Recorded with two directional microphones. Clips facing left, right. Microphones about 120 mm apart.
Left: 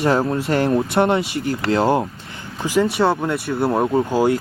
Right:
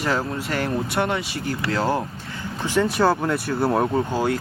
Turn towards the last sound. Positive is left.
turn(degrees=10)  # may be behind; listen again after turning